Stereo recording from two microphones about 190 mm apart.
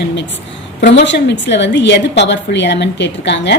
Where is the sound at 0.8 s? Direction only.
65° left (ahead or behind).